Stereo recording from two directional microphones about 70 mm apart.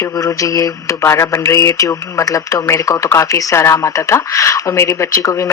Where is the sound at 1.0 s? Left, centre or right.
Left.